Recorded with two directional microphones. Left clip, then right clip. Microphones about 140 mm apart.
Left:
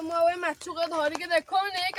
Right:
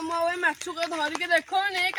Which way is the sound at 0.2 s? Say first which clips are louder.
Left 2 dB; 35° left (ahead or behind).